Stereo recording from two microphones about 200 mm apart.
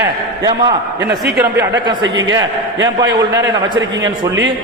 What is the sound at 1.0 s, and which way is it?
Speech, 55° right (ahead or behind).